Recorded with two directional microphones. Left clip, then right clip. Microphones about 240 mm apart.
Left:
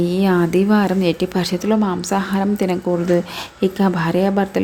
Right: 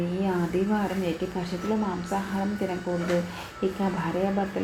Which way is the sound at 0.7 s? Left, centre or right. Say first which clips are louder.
Left 10 dB; left.